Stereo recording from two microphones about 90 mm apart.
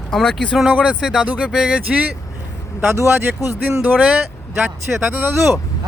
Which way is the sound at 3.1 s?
25° right (ahead or behind).